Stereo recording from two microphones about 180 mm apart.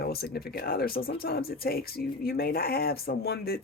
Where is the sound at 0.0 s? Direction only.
60° left (ahead or behind).